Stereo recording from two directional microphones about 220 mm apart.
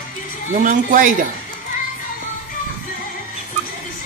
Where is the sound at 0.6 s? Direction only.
35° right (ahead or behind).